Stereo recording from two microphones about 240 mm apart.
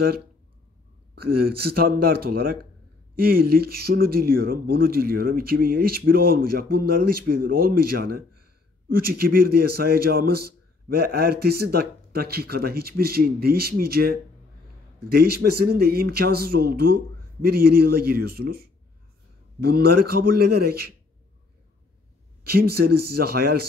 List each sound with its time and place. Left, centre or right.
1.1 s a man's voice: right
22.4 s a man's voice: right